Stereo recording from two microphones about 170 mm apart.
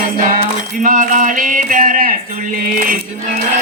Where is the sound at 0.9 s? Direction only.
50° right (ahead or behind).